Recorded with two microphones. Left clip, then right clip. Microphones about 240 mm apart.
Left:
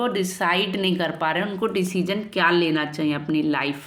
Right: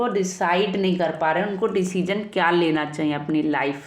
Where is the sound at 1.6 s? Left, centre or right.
Left.